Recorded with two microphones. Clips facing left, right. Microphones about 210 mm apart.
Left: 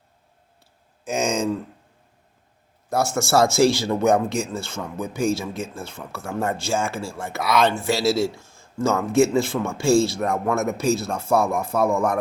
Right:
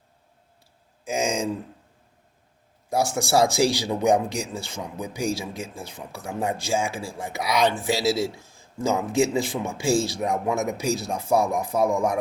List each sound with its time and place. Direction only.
1.0 s speech: 10° right (ahead or behind)
2.9 s speech: 15° right (ahead or behind)